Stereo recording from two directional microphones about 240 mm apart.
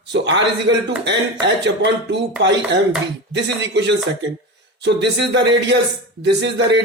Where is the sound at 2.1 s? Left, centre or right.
Right.